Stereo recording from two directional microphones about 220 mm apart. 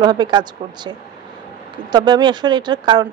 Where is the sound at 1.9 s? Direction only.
20° right (ahead or behind).